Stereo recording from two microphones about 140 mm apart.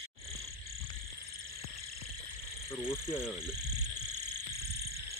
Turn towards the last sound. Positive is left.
turn(degrees=-5)  # may be behind; listen again after turning